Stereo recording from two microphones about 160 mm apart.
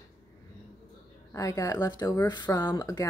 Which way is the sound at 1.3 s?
20° left (ahead or behind).